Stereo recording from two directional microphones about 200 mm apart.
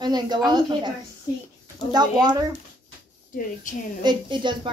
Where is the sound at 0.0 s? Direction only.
20° right (ahead or behind).